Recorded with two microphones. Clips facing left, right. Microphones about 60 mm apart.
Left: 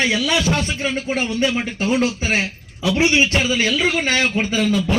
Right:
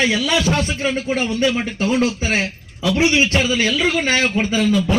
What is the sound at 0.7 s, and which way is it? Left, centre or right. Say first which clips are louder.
Speech: right 2 dB; centre.